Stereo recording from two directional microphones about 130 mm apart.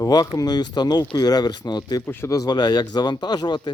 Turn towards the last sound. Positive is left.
turn(degrees=35)  # may be behind; listen again after turning